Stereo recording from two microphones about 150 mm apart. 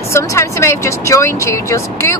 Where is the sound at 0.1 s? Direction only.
20° left (ahead or behind).